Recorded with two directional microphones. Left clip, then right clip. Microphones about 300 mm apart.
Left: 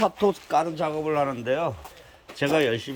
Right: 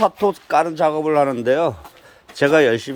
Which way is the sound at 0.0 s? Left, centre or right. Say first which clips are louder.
Right 5 dB; centre.